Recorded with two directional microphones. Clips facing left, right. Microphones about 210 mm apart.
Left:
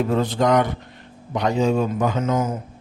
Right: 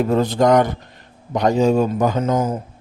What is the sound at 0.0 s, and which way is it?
Speech, 40° right (ahead or behind).